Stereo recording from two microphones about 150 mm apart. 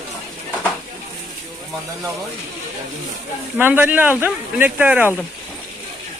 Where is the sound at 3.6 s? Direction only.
10° right (ahead or behind).